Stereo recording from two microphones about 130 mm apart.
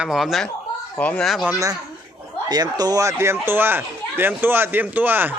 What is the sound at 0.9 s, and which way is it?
Speech, 10° left (ahead or behind).